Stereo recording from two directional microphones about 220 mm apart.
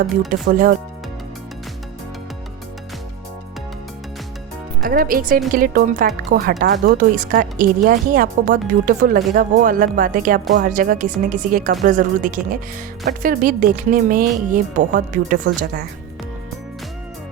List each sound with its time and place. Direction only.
0.3 s speech: 35° right (ahead or behind)
4.8 s speech: 40° right (ahead or behind)